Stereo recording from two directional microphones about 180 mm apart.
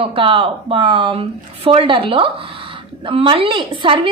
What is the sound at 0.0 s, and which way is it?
A woman's voice, 30° right (ahead or behind).